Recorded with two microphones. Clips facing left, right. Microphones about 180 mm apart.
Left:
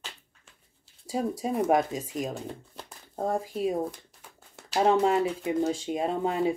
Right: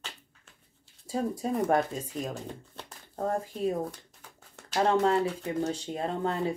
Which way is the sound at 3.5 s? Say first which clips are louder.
Left 2 dB; 10° left (ahead or behind).